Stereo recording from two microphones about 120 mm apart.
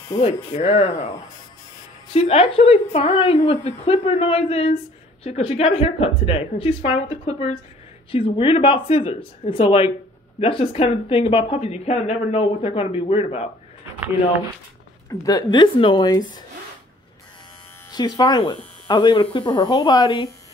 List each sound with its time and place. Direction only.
0.2 s a woman's voice: 60° left (ahead or behind)
2.1 s a woman's voice: 60° left (ahead or behind)
15.0 s speech: 30° left (ahead or behind)
17.9 s speech: 35° left (ahead or behind)